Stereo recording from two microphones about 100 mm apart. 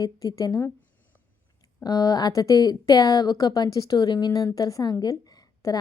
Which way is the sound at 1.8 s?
40° left (ahead or behind).